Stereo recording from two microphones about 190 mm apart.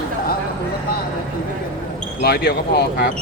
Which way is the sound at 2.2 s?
55° left (ahead or behind).